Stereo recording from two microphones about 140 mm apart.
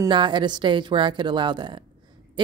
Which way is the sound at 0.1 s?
35° right (ahead or behind).